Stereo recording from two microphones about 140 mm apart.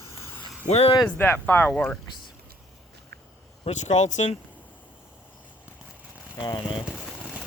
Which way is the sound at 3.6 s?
55° left (ahead or behind).